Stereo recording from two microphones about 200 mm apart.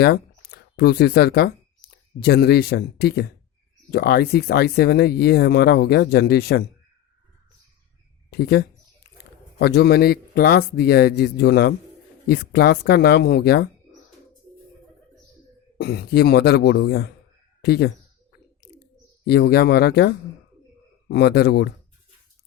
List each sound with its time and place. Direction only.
0.0 s speech: 50° left (ahead or behind)
8.3 s speech: 50° left (ahead or behind)
15.8 s speech: 55° left (ahead or behind)
19.2 s speech: 55° left (ahead or behind)